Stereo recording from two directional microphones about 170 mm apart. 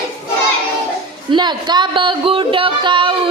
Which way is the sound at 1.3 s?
25° right (ahead or behind).